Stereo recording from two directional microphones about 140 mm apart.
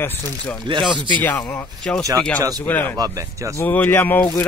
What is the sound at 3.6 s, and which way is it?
Speech, 15° left (ahead or behind).